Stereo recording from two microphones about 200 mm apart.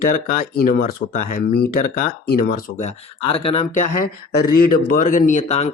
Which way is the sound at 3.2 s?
30° left (ahead or behind).